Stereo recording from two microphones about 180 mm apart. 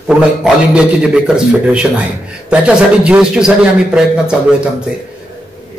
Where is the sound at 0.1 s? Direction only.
5° right (ahead or behind).